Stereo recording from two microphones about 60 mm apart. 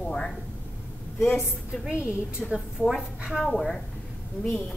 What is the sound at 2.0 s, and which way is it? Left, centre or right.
Speech, right.